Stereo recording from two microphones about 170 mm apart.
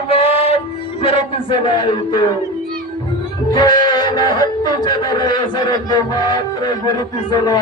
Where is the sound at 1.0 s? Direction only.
30° left (ahead or behind).